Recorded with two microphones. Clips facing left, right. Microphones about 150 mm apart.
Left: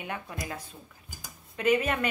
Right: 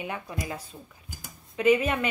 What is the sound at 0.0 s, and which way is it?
Speech, 10° right (ahead or behind).